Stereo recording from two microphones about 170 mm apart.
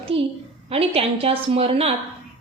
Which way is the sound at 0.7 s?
35° right (ahead or behind).